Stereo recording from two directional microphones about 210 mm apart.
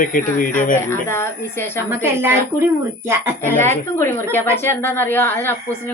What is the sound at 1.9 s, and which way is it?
Speech, 10° right (ahead or behind).